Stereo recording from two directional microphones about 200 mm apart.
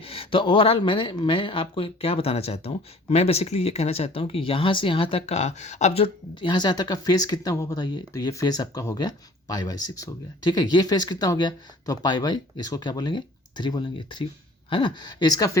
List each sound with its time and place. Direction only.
0.0 s speech: 30° left (ahead or behind)